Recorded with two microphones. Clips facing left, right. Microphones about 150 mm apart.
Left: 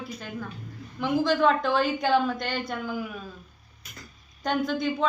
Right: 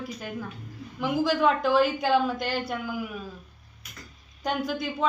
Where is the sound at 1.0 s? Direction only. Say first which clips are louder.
Left 1 dB; 5° right (ahead or behind).